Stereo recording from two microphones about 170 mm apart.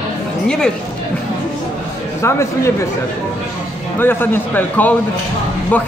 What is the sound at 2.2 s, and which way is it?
Speech, 15° left (ahead or behind).